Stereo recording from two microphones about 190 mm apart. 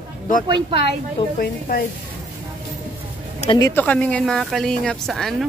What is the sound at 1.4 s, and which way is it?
Speech, 55° left (ahead or behind).